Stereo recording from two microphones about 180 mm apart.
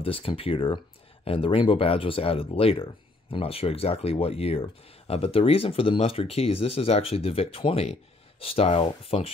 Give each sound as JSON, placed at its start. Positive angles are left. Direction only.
{"t": 0.0, "sound": "speech", "side_deg": 30}